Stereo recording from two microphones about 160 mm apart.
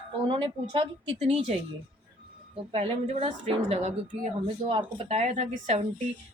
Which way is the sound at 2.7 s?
40° right (ahead or behind).